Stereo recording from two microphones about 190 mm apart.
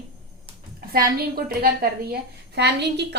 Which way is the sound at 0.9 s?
50° right (ahead or behind).